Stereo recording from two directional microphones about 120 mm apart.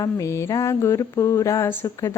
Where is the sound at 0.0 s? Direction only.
25° left (ahead or behind).